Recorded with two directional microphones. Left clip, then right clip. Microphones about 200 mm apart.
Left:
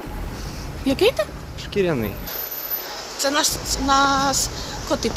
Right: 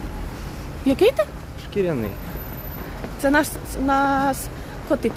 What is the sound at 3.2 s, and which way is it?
A woman's voice, 40° right (ahead or behind).